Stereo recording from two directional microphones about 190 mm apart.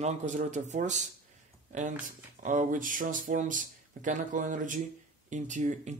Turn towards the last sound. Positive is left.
turn(degrees=-40)  # may be behind; listen again after turning